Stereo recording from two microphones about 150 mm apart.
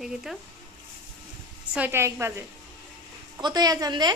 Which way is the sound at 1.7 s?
15° right (ahead or behind).